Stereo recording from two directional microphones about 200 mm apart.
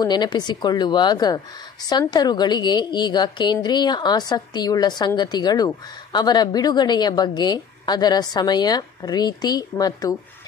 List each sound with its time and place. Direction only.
0.0 s a woman's voice: 20° left (ahead or behind)